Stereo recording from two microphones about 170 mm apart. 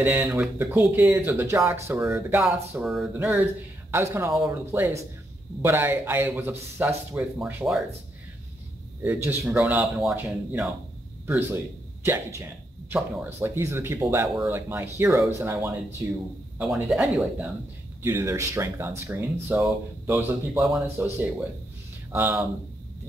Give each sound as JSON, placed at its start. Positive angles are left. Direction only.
{"t": 0.0, "sound": "speech", "side_deg": -10}
{"t": 2.7, "sound": "speech", "side_deg": -5}
{"t": 3.9, "sound": "speech", "side_deg": -15}
{"t": 9.0, "sound": "speech", "side_deg": -10}
{"t": 16.5, "sound": "speech", "side_deg": -5}
{"t": 18.0, "sound": "speech", "side_deg": -15}